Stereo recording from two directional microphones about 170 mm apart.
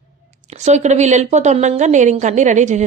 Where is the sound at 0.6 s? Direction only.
40° right (ahead or behind).